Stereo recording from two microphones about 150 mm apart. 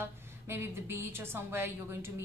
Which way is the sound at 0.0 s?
15° right (ahead or behind).